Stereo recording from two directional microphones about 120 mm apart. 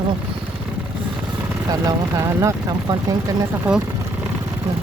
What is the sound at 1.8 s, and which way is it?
Speech, 25° right (ahead or behind).